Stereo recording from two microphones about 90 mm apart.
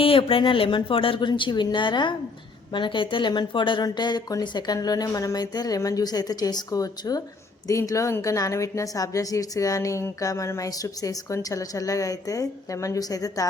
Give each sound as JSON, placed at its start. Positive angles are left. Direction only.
{"t": 0.0, "sound": "speech", "side_deg": 85}
{"t": 1.3, "sound": "speech", "side_deg": 55}
{"t": 3.8, "sound": "a woman's voice", "side_deg": 50}